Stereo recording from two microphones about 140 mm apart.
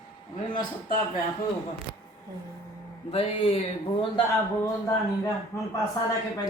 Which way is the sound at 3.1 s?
40° left (ahead or behind).